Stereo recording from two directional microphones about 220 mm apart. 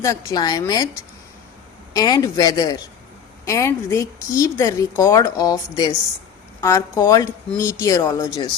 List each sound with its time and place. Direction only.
0.0 s speech: 15° left (ahead or behind)
1.9 s speech: 15° left (ahead or behind)